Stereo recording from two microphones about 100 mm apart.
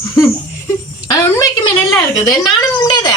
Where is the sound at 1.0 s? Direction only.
35° left (ahead or behind).